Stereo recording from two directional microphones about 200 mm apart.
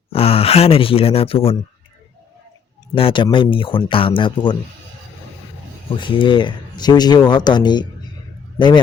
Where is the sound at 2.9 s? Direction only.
25° left (ahead or behind).